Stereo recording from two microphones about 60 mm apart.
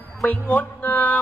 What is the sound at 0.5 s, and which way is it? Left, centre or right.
Music, left.